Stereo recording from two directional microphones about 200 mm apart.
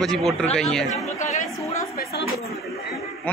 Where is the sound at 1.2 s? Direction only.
35° left (ahead or behind).